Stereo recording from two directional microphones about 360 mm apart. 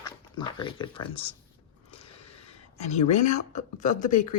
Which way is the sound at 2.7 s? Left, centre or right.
Centre.